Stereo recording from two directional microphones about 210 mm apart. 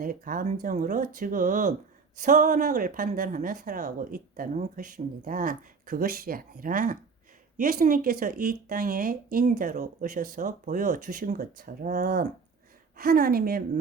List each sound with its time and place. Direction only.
0.0 s speech: 40° right (ahead or behind)